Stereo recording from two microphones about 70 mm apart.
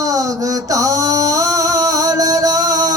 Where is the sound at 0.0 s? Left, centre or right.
Right.